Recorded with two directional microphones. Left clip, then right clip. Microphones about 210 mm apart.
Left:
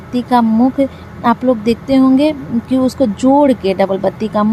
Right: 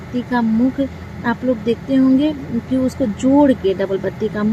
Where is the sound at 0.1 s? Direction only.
35° left (ahead or behind).